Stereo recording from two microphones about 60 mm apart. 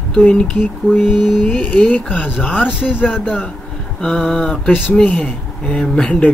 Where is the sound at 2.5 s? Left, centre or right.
Centre.